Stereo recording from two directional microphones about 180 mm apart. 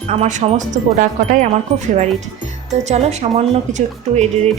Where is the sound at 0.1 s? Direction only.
40° right (ahead or behind).